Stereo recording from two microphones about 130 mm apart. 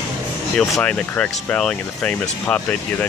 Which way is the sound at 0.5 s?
Centre (ahead or behind).